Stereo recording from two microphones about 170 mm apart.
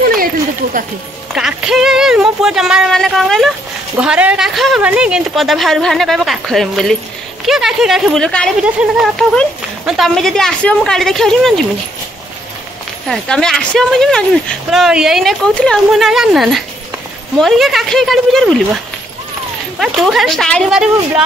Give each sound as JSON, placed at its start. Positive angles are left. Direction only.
{"t": 0.0, "sound": "a sound", "side_deg": -60}
{"t": 1.3, "sound": "speech", "side_deg": -5}
{"t": 13.1, "sound": "speech", "side_deg": 5}
{"t": 19.8, "sound": "speech", "side_deg": 0}